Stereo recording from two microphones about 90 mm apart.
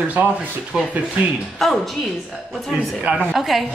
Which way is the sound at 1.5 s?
Centre (ahead or behind).